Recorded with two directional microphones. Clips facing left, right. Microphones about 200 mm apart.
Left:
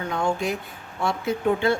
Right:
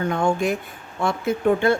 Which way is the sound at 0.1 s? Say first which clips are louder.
Right 1 dB; 50° right (ahead or behind).